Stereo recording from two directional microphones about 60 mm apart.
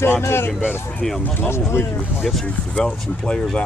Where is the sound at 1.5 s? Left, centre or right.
Left.